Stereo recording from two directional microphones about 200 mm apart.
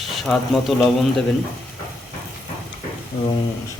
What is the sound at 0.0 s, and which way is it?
Speech, centre (ahead or behind).